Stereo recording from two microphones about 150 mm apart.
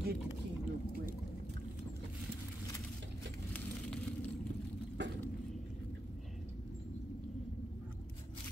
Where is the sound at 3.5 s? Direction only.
10° left (ahead or behind).